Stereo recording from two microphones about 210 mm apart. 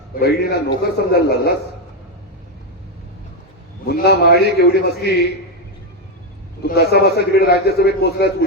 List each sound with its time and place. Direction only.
0.2 s a man's voice: 50° left (ahead or behind)
3.8 s a man's voice: 50° left (ahead or behind)
6.6 s a man's voice: 50° left (ahead or behind)